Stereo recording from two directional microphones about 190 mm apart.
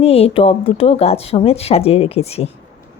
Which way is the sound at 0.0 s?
30° left (ahead or behind).